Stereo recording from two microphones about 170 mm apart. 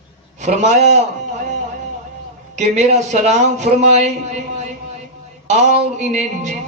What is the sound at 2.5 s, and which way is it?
Music, 45° right (ahead or behind).